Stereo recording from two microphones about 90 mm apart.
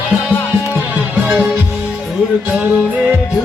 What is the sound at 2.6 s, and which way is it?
Music, 20° right (ahead or behind).